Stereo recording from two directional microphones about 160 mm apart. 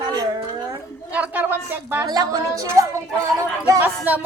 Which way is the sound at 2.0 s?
25° right (ahead or behind).